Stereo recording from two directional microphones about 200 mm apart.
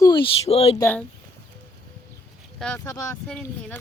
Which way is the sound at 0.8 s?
10° left (ahead or behind).